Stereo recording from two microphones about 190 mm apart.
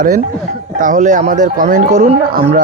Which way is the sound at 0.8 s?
40° right (ahead or behind).